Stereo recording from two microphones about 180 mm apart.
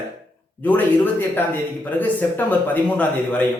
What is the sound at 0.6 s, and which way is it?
A man's voice, 10° left (ahead or behind).